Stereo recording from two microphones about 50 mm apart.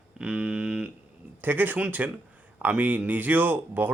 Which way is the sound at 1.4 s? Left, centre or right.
Right.